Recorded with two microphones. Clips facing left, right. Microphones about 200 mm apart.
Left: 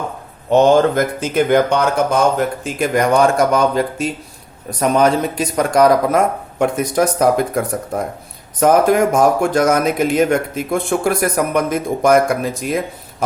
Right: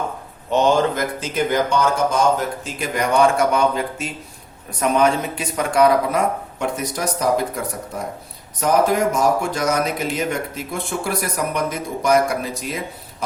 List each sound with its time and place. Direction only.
0.5 s speech: 50° left (ahead or behind)